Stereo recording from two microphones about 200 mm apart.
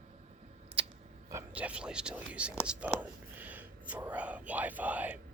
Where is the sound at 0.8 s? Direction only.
25° right (ahead or behind).